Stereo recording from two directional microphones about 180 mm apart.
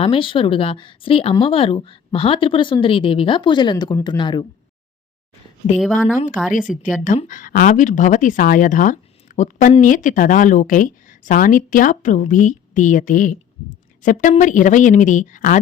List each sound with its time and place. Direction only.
0.0 s speech: 30° left (ahead or behind)
6.5 s speech: 45° left (ahead or behind)